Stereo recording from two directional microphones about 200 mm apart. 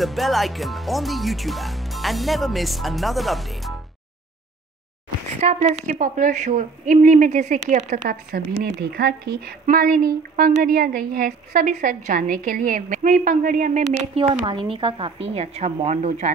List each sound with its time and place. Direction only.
0.0 s speech: centre (ahead or behind)
5.4 s a woman's voice: 35° right (ahead or behind)